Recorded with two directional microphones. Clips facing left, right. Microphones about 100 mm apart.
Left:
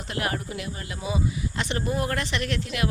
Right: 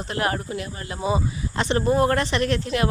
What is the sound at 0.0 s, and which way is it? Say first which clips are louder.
Speech: right 4 dB; 35° right (ahead or behind).